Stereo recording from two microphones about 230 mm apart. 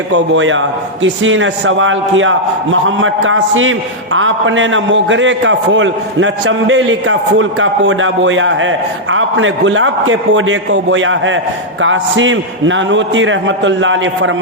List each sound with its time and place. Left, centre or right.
0.1 s a man's voice: right